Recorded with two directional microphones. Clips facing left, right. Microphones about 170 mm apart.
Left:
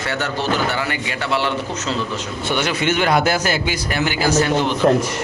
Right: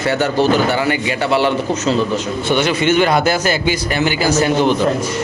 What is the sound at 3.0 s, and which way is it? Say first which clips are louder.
A man's voice: right 3 dB; 10° left (ahead or behind).